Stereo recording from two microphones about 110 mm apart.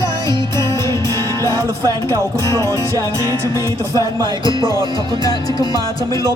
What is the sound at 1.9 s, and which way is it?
Speech, 30° right (ahead or behind).